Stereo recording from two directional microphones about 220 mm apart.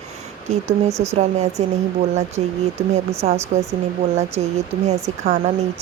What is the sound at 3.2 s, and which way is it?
Speech, 30° right (ahead or behind).